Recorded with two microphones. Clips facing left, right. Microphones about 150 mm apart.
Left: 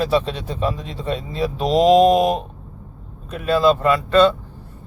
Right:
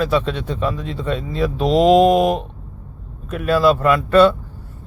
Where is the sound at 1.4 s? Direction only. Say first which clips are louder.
Right 1 dB; centre (ahead or behind).